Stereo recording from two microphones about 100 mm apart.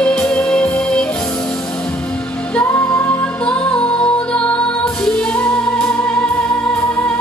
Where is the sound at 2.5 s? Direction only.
20° left (ahead or behind).